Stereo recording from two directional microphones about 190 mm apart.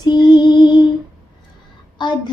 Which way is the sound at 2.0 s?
25° left (ahead or behind).